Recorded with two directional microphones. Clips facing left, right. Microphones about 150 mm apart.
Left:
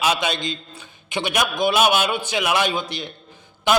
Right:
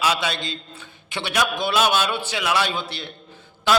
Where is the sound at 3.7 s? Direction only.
15° left (ahead or behind).